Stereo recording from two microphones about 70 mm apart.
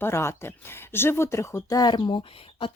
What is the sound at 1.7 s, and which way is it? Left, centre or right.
Speech, left.